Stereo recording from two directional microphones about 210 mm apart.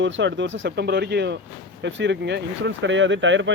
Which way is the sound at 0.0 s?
60° right (ahead or behind).